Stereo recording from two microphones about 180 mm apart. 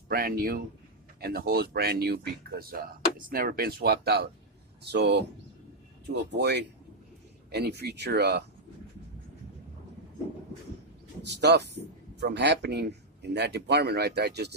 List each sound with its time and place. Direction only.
0.1 s speech: 55° right (ahead or behind)
6.3 s speech: 70° right (ahead or behind)
11.2 s speech: 70° right (ahead or behind)